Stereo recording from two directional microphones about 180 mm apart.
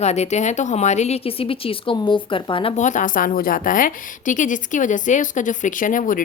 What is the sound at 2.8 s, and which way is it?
A woman's voice, 45° left (ahead or behind).